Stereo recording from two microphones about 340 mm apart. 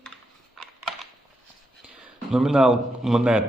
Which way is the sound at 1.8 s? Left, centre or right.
Centre.